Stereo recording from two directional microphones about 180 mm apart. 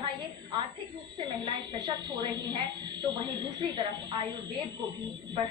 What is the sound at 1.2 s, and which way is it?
A woman's voice, 25° right (ahead or behind).